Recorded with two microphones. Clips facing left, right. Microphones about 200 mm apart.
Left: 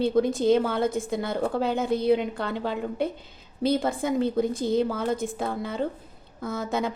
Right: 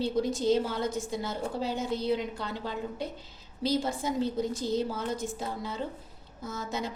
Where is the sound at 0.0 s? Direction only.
55° left (ahead or behind).